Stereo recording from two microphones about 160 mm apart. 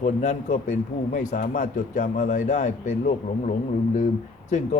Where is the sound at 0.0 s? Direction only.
50° left (ahead or behind).